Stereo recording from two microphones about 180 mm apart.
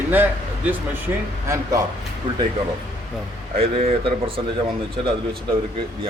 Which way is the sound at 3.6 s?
35° right (ahead or behind).